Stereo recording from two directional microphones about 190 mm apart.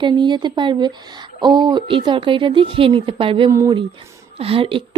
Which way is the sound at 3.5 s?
20° right (ahead or behind).